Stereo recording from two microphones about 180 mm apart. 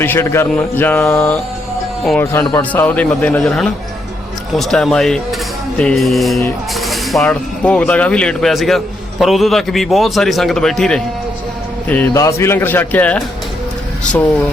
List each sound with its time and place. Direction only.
0.0 s speech: 15° left (ahead or behind)
11.9 s speech: 15° left (ahead or behind)